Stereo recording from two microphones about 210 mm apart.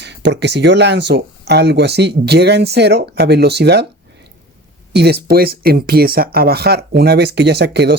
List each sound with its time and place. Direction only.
0.0 s speech: 55° right (ahead or behind)
4.9 s speech: 50° right (ahead or behind)